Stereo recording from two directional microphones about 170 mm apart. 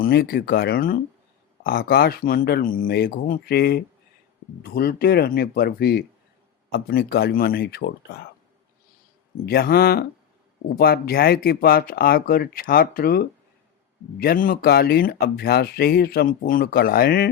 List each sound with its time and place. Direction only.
0.0 s speech: 65° left (ahead or behind)
9.5 s speech: 65° left (ahead or behind)